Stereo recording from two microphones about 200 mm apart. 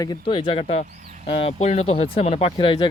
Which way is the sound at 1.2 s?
30° left (ahead or behind).